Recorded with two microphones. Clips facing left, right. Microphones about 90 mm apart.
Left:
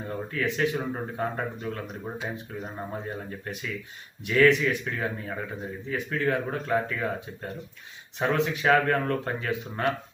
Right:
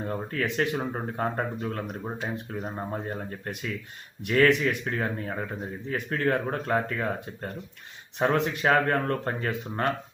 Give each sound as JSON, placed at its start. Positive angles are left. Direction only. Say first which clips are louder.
{"t": 0.0, "sound": "speech", "louder": "even", "side_deg": -45}